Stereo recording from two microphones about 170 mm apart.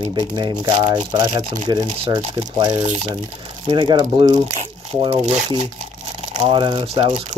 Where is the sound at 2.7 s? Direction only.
40° right (ahead or behind).